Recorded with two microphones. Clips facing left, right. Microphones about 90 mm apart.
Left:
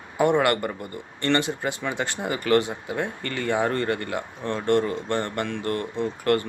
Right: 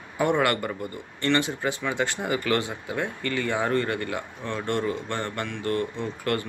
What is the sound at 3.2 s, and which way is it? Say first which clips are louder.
Speech: left 2 dB; 35° left (ahead or behind).